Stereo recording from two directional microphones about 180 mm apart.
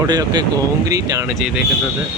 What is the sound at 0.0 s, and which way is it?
Speech, 20° right (ahead or behind).